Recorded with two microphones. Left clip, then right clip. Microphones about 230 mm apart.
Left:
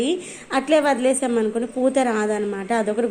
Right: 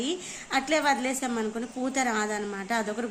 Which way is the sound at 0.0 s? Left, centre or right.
Centre.